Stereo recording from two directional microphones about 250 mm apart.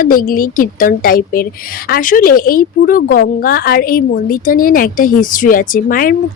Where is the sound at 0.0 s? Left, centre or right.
Left.